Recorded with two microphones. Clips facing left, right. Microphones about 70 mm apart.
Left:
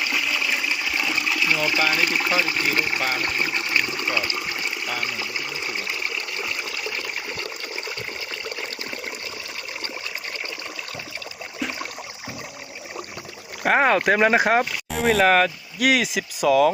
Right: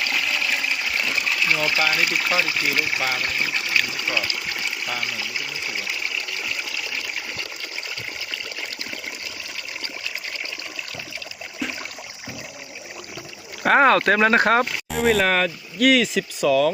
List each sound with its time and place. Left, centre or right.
0.0 s water: centre
2.1 s speech: centre
2.5 s speech: left
4.0 s water: left
4.9 s a sound: left
11.6 s a sound: centre
13.6 s speech: centre